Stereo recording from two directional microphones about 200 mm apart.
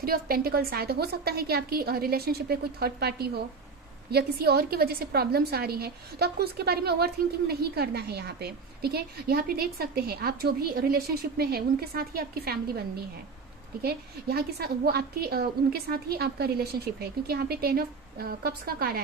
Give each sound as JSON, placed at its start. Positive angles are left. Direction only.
{"t": 0.0, "sound": "a woman's voice", "side_deg": -50}
{"t": 13.8, "sound": "a woman's voice", "side_deg": -50}